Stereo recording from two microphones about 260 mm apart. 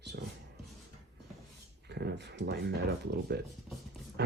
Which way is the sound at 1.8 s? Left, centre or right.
Right.